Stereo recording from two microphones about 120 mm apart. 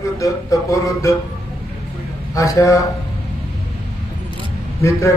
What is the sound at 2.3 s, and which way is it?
Speech, 25° left (ahead or behind).